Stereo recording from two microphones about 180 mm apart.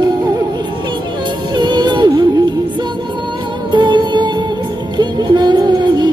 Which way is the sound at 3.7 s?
25° right (ahead or behind).